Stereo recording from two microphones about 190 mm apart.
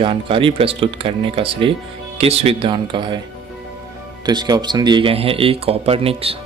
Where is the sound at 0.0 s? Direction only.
25° right (ahead or behind).